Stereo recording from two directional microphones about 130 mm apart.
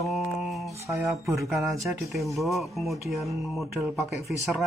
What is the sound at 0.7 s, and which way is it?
Speech, 20° right (ahead or behind).